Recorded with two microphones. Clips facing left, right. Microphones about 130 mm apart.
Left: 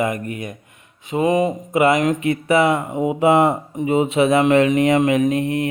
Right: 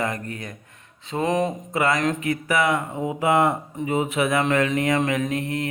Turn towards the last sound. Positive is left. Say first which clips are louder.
# left 7 dB
turn(degrees=20)  # may be behind; listen again after turning